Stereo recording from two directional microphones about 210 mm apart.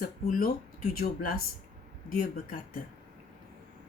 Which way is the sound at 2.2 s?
40° left (ahead or behind).